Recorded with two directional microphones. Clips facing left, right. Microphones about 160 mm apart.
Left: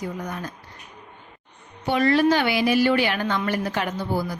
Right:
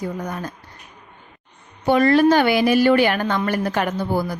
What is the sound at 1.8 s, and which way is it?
A woman's voice, 45° right (ahead or behind).